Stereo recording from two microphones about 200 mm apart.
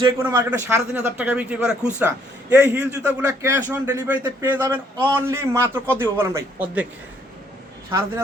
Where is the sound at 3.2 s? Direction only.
10° right (ahead or behind).